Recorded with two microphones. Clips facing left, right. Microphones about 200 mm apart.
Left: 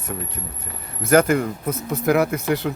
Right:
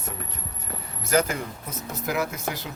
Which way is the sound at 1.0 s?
55° left (ahead or behind).